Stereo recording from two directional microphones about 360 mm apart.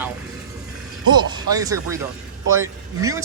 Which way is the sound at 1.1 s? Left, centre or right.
Centre.